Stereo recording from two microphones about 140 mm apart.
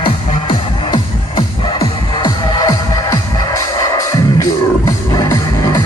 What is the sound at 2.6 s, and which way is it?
Music, 25° left (ahead or behind).